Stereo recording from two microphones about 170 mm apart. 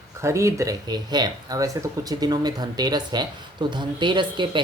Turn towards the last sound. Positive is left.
turn(degrees=-30)  # may be behind; listen again after turning